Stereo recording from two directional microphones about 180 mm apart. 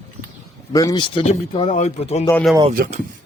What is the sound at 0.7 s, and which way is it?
Speech, 20° left (ahead or behind).